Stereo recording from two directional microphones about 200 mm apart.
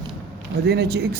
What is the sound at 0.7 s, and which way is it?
Speech, 55° right (ahead or behind).